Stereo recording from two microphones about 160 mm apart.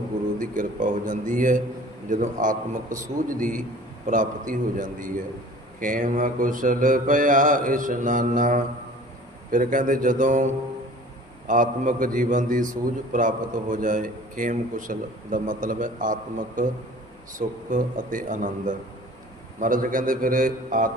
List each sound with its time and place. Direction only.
0.3 s a man's voice: 55° right (ahead or behind)